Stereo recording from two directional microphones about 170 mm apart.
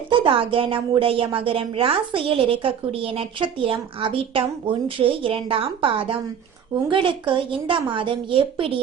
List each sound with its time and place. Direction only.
0.1 s a woman's voice: 30° right (ahead or behind)